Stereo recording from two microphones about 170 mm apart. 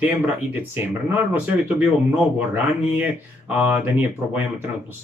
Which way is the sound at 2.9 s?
10° right (ahead or behind).